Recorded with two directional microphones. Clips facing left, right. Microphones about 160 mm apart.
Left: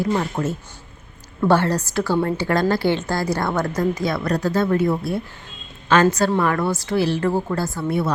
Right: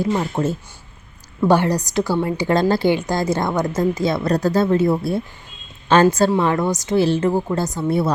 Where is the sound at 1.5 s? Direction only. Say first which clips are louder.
Right 1 dB; 15° right (ahead or behind).